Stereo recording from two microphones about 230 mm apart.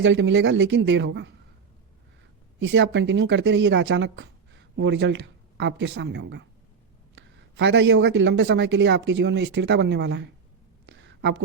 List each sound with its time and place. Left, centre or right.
0.0 s speech: right
2.6 s speech: right
10.8 s a sound: right